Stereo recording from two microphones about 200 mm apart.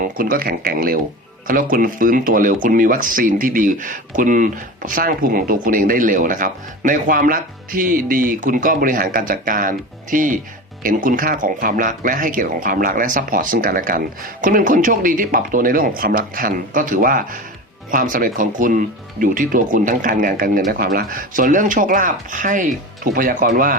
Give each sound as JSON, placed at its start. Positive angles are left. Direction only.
{"t": 0.0, "sound": "speech", "side_deg": -45}